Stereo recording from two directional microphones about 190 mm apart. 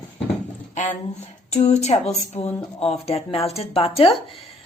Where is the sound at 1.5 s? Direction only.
35° left (ahead or behind).